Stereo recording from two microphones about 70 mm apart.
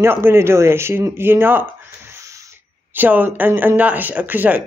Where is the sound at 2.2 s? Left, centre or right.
Right.